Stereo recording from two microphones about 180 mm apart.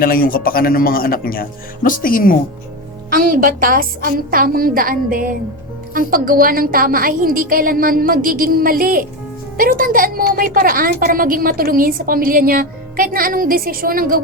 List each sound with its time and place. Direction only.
0.0 s speech: 55° left (ahead or behind)
3.1 s a woman's voice: 50° right (ahead or behind)